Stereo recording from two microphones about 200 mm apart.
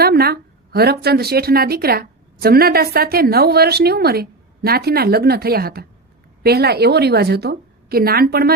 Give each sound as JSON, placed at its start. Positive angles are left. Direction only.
{"t": 0.0, "sound": "a woman's voice", "side_deg": -50}